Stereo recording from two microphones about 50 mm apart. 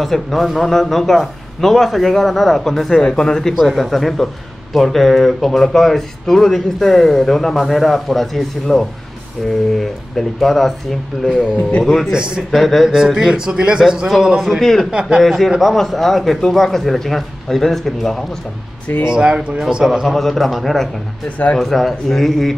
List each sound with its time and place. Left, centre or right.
0.0 s speech: centre
3.5 s speech: centre
11.2 s speech: centre
11.8 s speech: centre
12.1 s speech: centre
12.4 s speech: centre
15.2 s speech: centre
19.1 s speech: centre
19.8 s speech: centre